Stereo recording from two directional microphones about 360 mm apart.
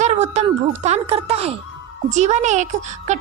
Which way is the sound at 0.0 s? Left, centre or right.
Centre.